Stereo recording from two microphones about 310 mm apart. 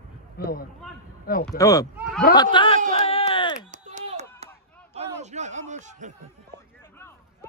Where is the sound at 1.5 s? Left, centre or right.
Centre.